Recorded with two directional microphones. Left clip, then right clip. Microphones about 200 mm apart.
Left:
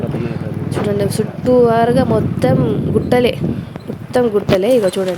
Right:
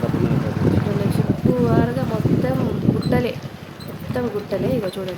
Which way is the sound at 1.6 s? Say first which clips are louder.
Left 9 dB; 35° left (ahead or behind).